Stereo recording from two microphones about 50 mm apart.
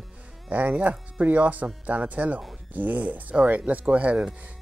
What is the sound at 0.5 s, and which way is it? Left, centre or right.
Speech, right.